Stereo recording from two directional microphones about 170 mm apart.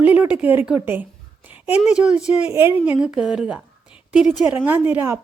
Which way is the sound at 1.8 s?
5° right (ahead or behind).